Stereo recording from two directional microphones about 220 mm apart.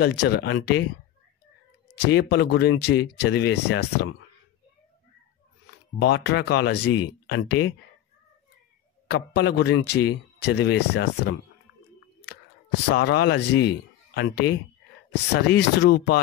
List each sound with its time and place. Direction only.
0.0 s speech: 50° left (ahead or behind)
2.0 s speech: 50° left (ahead or behind)
5.9 s speech: 45° left (ahead or behind)
9.0 s speech: 45° left (ahead or behind)
12.9 s speech: 50° left (ahead or behind)